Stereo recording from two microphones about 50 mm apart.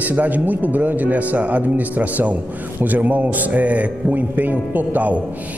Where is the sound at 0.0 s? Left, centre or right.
Right.